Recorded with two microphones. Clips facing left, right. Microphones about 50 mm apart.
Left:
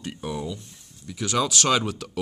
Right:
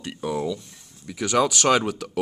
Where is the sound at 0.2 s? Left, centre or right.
Right.